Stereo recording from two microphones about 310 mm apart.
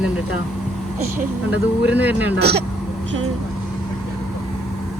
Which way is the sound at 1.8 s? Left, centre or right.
Centre.